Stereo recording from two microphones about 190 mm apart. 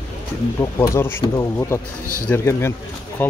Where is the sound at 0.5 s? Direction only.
15° left (ahead or behind).